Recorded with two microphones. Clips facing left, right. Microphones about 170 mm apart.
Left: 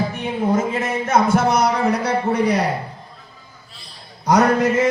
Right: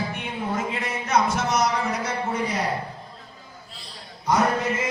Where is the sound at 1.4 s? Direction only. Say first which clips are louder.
Left 6 dB; 60° left (ahead or behind).